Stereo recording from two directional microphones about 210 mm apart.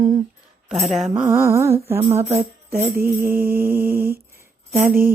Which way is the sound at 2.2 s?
30° right (ahead or behind).